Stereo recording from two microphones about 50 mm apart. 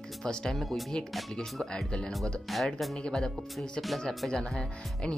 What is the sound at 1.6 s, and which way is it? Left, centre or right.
Speech, centre.